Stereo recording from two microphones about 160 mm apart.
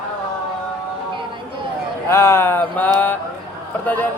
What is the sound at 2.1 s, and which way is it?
Mantra, 15° left (ahead or behind).